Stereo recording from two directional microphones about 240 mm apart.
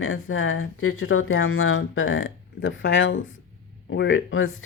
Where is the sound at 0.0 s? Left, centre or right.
Left.